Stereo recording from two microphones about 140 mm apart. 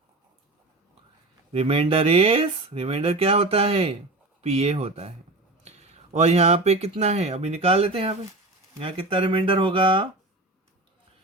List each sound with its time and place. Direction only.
1.5 s speech: 45° right (ahead or behind)